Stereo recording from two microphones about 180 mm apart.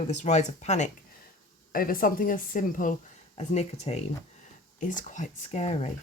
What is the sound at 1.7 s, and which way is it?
Speech, 50° left (ahead or behind).